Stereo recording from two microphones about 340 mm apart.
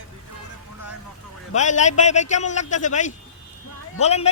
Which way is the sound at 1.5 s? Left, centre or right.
Left.